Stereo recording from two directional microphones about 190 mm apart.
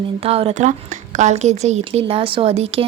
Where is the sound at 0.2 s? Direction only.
30° right (ahead or behind).